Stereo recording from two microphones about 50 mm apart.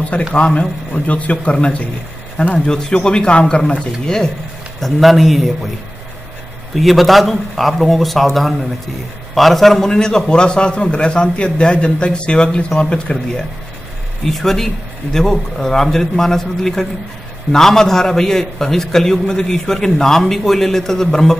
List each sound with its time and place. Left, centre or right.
0.4 s speech: left
4.7 s speech: centre
6.7 s a man's voice: centre
14.3 s a man's voice: centre